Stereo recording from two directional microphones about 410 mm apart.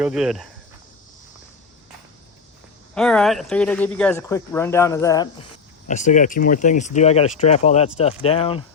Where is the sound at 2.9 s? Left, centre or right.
Centre.